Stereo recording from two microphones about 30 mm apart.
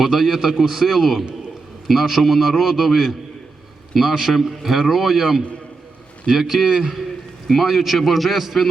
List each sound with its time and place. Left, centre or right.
0.0 s a man's voice: centre
7.6 s a man's voice: centre